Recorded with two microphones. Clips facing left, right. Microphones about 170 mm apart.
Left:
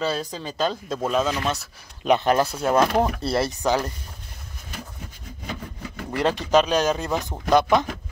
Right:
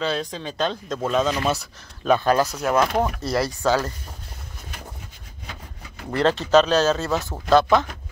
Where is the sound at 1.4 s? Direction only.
5° right (ahead or behind).